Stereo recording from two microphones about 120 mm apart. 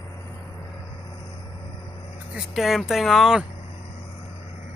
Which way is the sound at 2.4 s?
Centre (ahead or behind).